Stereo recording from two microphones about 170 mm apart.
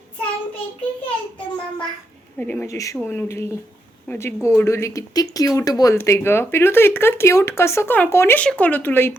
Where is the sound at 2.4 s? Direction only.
10° left (ahead or behind).